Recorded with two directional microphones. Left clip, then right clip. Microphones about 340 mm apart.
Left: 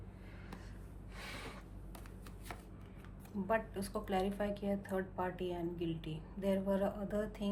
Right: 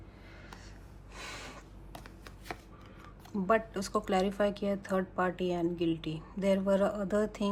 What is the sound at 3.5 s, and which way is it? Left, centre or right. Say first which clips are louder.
A woman's voice: right 7 dB; centre.